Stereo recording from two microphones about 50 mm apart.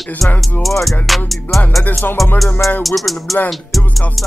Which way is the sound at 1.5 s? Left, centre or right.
Left.